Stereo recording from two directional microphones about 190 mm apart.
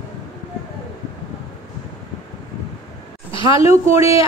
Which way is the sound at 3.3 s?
25° left (ahead or behind).